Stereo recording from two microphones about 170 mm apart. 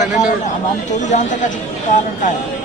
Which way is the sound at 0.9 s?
45° left (ahead or behind).